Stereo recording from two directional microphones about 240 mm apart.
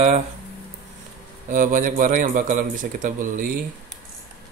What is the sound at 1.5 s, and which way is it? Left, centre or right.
A man's voice, right.